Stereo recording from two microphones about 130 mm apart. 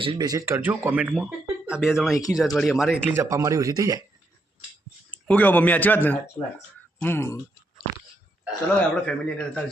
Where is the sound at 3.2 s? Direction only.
25° right (ahead or behind).